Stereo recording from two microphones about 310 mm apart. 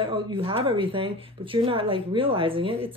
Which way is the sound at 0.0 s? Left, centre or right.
Centre.